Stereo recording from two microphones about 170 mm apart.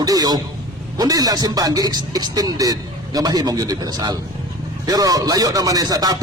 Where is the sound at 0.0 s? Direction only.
20° right (ahead or behind).